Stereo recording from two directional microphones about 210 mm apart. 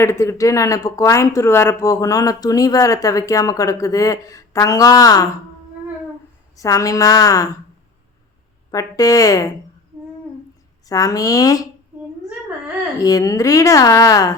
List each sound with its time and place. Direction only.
0.0 s speech: 15° left (ahead or behind)
6.6 s speech: 15° left (ahead or behind)
8.7 s speech: 15° left (ahead or behind)
10.8 s speech: 15° left (ahead or behind)
13.0 s speech: 15° left (ahead or behind)